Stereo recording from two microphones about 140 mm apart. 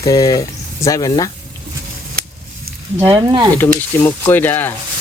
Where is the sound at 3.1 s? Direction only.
25° right (ahead or behind).